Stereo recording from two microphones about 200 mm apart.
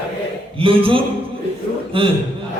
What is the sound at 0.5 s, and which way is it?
A man's voice, 25° right (ahead or behind).